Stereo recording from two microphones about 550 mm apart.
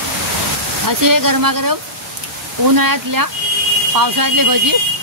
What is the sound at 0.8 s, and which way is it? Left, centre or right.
Speech, right.